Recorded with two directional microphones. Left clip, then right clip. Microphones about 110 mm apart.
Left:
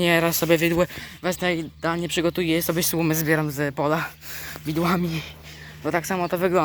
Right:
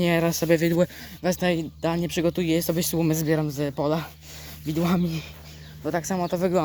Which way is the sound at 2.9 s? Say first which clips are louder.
Left 2 dB; 35° right (ahead or behind).